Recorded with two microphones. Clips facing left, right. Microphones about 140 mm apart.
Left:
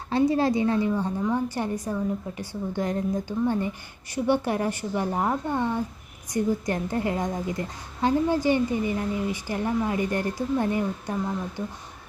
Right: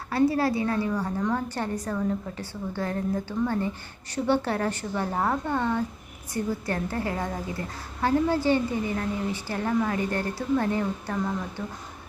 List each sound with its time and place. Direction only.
0.1 s a woman's voice: 20° left (ahead or behind)